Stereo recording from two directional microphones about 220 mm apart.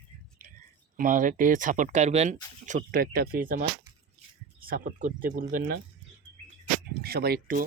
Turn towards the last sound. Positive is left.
turn(degrees=-40)  # may be behind; listen again after turning